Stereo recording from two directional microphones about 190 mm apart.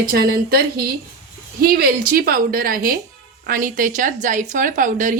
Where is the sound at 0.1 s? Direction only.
55° right (ahead or behind).